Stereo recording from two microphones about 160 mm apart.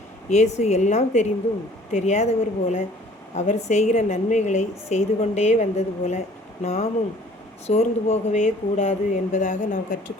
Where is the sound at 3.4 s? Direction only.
45° left (ahead or behind).